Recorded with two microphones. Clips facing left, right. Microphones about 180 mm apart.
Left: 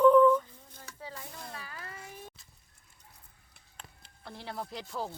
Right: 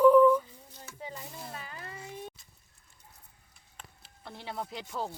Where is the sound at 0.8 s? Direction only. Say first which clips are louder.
Right 2 dB; 20° right (ahead or behind).